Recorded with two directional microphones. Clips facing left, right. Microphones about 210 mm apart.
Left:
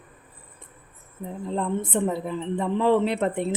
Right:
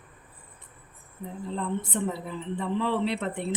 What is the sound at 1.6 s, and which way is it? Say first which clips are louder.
A woman's voice: left 5 dB; 50° left (ahead or behind).